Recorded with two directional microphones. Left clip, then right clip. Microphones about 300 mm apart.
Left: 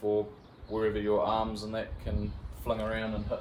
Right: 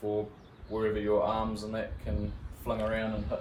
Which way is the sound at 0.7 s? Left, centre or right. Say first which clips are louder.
Even; centre.